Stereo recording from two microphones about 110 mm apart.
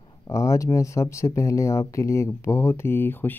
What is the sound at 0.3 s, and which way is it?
Speech, 30° left (ahead or behind).